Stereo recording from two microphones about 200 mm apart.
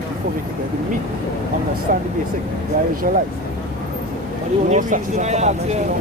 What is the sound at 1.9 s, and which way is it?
Speech, 45° right (ahead or behind).